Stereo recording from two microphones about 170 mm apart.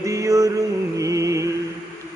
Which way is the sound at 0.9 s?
20° right (ahead or behind).